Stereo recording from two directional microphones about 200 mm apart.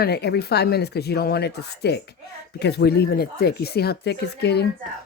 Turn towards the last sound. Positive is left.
turn(degrees=55)  # may be behind; listen again after turning